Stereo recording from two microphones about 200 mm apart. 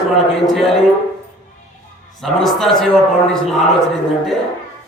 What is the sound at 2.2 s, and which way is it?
A man's voice, centre (ahead or behind).